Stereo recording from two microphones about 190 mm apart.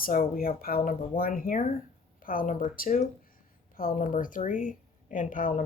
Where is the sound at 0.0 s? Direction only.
50° left (ahead or behind).